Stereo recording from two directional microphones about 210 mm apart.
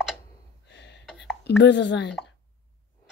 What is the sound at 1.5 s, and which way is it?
Speech, 55° left (ahead or behind).